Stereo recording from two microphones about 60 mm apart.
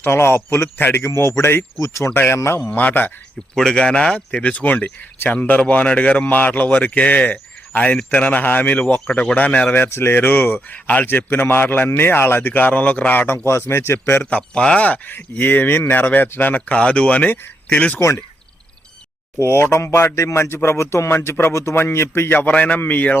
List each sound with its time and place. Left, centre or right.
0.0 s speech: left
2.6 s speech: left
3.5 s speech: centre; by 9.8 s left
9.8 s speech: left
13.5 s speech: left
14.3 s speech: centre
16.7 s speech: centre
19.4 s speech: left